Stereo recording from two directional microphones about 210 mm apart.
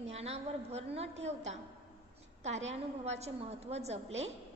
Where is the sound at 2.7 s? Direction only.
30° right (ahead or behind).